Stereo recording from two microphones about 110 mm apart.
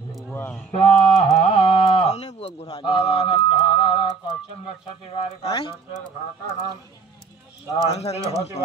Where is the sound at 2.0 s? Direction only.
80° left.